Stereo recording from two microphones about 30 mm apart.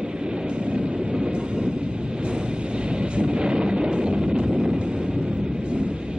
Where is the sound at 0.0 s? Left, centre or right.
Right.